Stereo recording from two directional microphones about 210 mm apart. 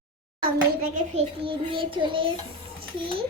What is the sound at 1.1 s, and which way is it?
A child's voice, 25° right (ahead or behind).